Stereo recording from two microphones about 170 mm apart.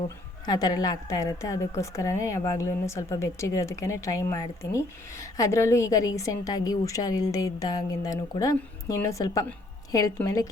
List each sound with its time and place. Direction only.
0.4 s a woman's voice: 20° left (ahead or behind)